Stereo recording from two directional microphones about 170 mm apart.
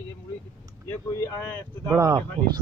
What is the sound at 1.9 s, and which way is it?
Speech, 20° right (ahead or behind).